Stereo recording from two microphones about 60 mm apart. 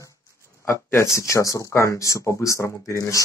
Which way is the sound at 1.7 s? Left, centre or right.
Left.